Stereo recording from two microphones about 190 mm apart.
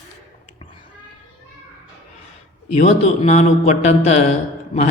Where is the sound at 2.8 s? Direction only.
35° left (ahead or behind).